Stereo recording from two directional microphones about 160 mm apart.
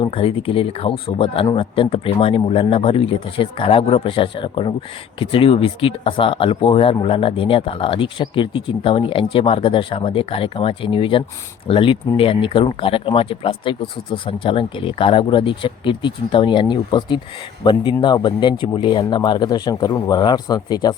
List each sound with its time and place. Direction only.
0.0 s speech: 35° left (ahead or behind)